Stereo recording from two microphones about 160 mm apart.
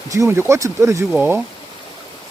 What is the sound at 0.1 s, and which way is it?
Speech, 15° right (ahead or behind).